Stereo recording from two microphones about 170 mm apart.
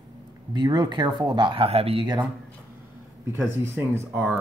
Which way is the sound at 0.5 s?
25° right (ahead or behind).